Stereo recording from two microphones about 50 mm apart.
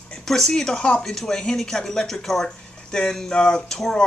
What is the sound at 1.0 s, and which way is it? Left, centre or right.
Speech, centre.